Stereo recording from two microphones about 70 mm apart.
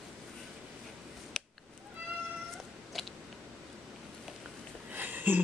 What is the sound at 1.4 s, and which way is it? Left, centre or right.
Chop, centre.